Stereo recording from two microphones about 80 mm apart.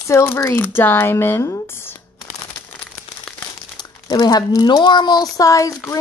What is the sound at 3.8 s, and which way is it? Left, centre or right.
Speech, left.